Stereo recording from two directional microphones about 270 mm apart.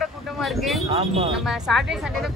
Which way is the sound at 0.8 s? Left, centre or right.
Right.